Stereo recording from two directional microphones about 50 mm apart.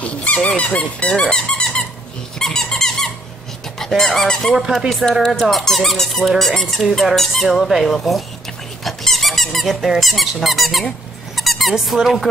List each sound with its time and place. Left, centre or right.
0.0 s speech: left
2.3 s squeak: centre
3.8 s speech: centre
7.9 s speech: centre
8.8 s squeak: centre
11.7 s speech: centre